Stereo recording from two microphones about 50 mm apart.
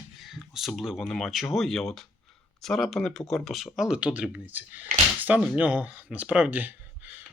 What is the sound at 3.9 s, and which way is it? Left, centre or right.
Speech, right.